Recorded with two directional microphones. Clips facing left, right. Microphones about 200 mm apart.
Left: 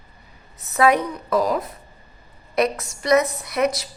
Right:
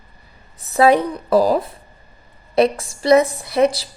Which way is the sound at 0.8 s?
30° right (ahead or behind).